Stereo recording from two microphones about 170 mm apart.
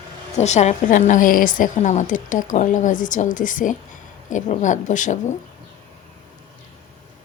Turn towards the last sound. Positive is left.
turn(degrees=45)  # may be behind; listen again after turning